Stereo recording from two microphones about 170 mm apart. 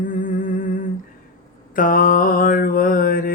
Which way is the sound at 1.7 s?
55° left (ahead or behind).